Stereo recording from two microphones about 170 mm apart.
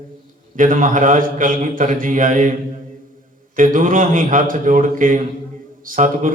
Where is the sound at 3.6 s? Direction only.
50° right (ahead or behind).